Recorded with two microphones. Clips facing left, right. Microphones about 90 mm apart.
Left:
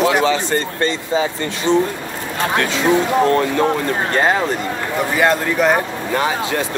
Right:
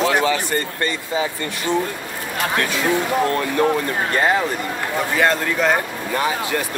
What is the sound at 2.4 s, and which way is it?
Speech, 25° left (ahead or behind).